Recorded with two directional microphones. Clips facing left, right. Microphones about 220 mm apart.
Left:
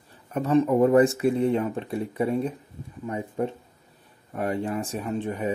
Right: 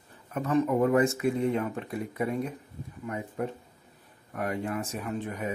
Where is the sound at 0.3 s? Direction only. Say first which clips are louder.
Left 5 dB; 30° left (ahead or behind).